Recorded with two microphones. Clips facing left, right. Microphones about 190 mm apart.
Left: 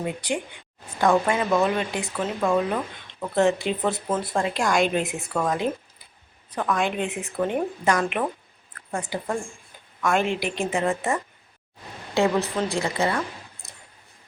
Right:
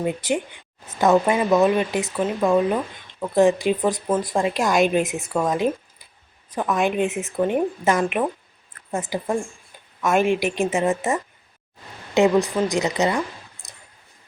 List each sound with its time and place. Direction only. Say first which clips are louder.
0.9 s a woman's voice: right 3 dB; 20° right (ahead or behind)